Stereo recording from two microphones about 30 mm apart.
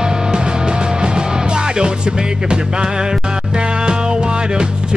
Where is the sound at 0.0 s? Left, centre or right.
Right.